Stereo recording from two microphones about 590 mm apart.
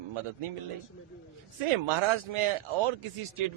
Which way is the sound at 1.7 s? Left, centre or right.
Right.